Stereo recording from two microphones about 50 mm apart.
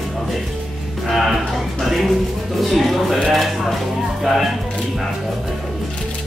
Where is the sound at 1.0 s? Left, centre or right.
Centre.